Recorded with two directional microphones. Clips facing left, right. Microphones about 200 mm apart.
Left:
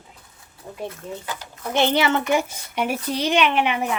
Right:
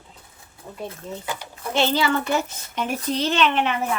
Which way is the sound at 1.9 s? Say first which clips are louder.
Left 2 dB; 20° left (ahead or behind).